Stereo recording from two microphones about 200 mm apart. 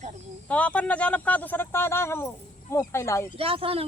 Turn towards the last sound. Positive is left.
turn(degrees=-30)  # may be behind; listen again after turning